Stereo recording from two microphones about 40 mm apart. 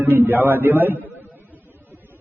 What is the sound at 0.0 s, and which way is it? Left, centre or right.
Speech, right.